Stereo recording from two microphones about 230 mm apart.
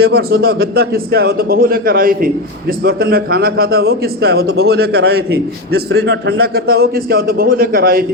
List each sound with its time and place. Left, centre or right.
0.0 s a man's voice: right